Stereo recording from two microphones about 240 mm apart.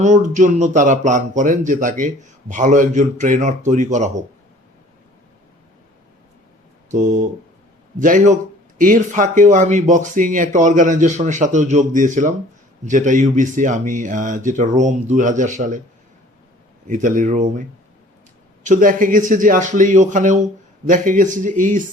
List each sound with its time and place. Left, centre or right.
0.0 s speech: right
6.9 s speech: right
16.8 s speech: right
18.6 s speech: right